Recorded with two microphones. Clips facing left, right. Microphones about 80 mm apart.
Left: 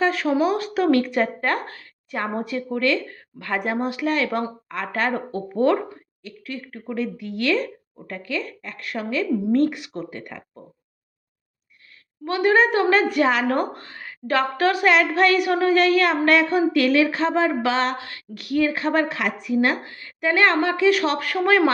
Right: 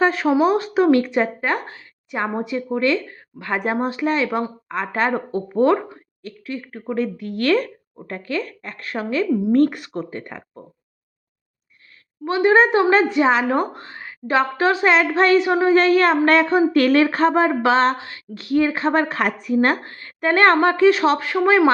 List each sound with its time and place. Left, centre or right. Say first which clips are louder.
0.0 s speech: right 3 dB; right
7.9 s speech: right 4 dB; right
9.5 s speech: right 3 dB; right
12.2 s speech: right 3 dB; right